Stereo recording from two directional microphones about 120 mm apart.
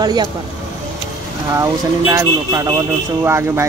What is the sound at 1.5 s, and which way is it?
Speech, 25° right (ahead or behind).